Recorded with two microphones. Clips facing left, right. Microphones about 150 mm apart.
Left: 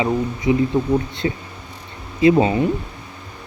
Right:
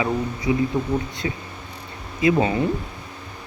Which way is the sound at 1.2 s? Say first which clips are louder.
Left 4 dB; 35° left (ahead or behind).